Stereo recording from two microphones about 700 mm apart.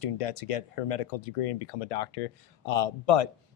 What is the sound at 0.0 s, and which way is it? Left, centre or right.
Speech, left.